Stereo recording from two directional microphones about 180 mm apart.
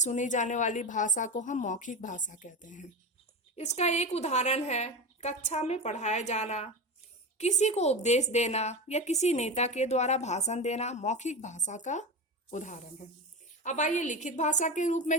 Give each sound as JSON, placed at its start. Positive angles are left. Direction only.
{"t": 0.0, "sound": "a woman's voice", "side_deg": 40}